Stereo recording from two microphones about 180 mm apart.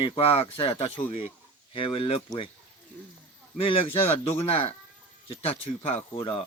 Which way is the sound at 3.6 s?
30° left (ahead or behind).